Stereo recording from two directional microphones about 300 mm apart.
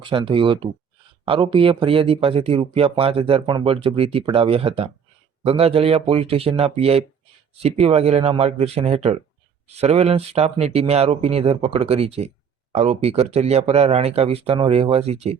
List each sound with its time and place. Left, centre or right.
0.0 s speech: centre